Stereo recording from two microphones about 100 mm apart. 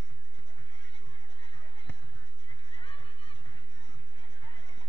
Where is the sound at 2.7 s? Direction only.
70° left (ahead or behind).